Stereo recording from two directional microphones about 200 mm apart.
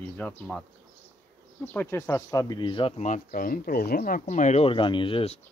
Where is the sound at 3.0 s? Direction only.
40° left (ahead or behind).